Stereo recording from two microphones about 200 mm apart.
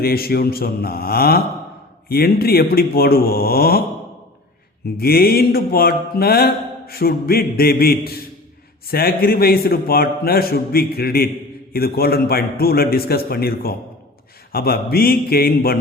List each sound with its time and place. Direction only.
0.0 s mantra: 50° left (ahead or behind)
4.9 s mantra: 50° left (ahead or behind)